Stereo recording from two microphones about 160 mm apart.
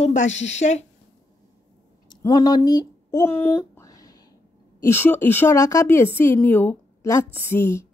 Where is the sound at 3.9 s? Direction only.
25° left (ahead or behind).